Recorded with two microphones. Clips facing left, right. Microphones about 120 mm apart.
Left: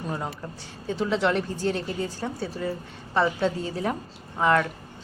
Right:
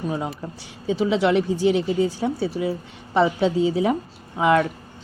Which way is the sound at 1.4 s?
90° right.